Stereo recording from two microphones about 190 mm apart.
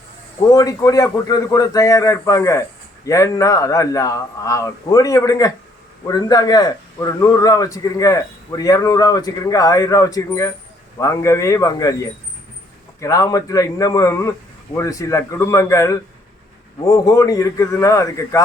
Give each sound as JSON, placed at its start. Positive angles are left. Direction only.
{"t": 0.5, "sound": "a man's voice", "side_deg": 15}